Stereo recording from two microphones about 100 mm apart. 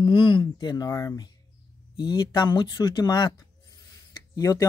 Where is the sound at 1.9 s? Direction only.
45° left (ahead or behind).